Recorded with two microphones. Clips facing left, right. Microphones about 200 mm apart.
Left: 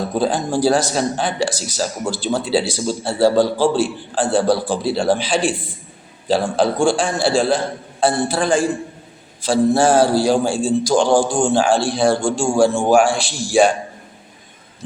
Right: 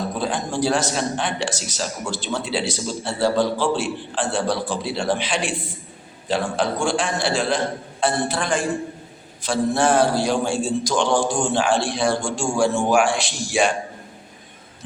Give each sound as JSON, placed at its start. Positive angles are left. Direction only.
{"t": 0.1, "sound": "a man's voice", "side_deg": 35}